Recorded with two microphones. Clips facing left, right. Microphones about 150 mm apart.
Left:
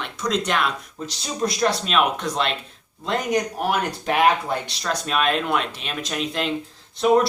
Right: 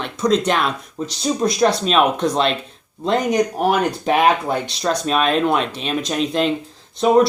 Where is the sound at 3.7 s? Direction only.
25° right (ahead or behind).